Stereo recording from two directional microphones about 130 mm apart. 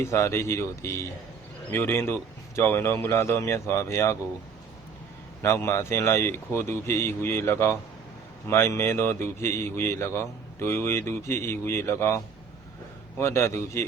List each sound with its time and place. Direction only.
0.0 s a man's voice: 20° left (ahead or behind)
5.4 s a man's voice: 20° left (ahead or behind)